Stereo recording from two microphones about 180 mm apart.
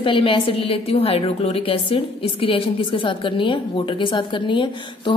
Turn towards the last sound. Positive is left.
turn(degrees=25)  # may be behind; listen again after turning